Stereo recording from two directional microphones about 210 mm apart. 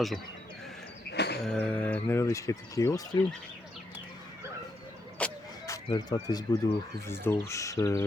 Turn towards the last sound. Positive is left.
turn(degrees=15)  # may be behind; listen again after turning